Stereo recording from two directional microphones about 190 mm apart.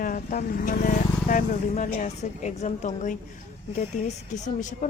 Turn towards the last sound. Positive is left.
turn(degrees=40)  # may be behind; listen again after turning